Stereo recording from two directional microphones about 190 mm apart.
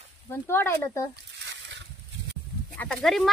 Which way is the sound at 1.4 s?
75° right (ahead or behind).